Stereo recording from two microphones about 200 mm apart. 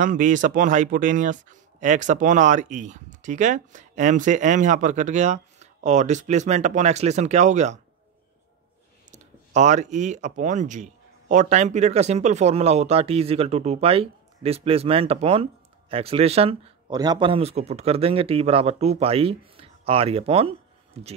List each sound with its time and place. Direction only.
0.0 s speech: 40° right (ahead or behind)
9.1 s speech: 35° right (ahead or behind)